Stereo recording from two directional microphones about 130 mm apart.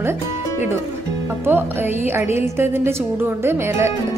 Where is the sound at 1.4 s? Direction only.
15° right (ahead or behind).